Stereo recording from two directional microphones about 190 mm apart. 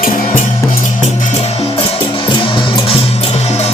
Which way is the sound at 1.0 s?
35° left (ahead or behind).